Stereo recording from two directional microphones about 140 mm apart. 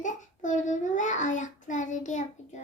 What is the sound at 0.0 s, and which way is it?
Child singing, 60° left (ahead or behind).